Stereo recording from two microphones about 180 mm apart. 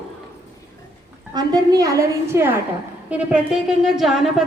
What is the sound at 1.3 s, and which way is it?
A woman's voice, 20° right (ahead or behind).